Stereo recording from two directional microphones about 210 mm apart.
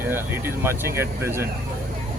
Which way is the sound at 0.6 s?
10° right (ahead or behind).